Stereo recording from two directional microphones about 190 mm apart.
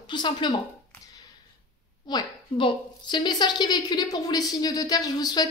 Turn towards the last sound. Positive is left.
turn(degrees=20)  # may be behind; listen again after turning